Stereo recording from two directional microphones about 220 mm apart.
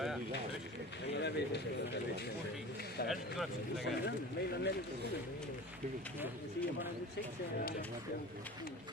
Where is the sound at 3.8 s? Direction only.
50° left (ahead or behind).